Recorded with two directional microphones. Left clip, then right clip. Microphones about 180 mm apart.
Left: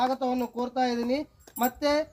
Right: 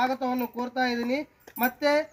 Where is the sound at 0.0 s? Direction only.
30° left (ahead or behind).